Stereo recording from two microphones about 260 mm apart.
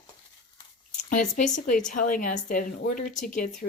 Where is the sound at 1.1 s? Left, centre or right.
Left.